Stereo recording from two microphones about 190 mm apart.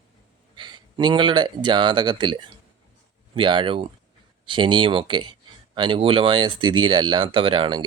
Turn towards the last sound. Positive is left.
turn(degrees=-25)  # may be behind; listen again after turning